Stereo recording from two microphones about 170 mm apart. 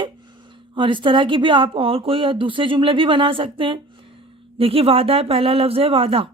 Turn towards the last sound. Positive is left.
turn(degrees=-35)  # may be behind; listen again after turning